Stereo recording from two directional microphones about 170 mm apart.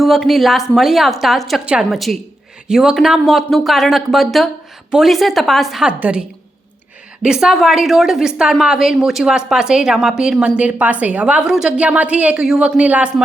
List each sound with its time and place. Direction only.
0.0 s a woman's voice: centre (ahead or behind)